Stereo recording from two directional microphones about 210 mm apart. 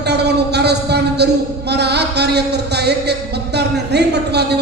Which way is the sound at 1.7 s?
50° right (ahead or behind).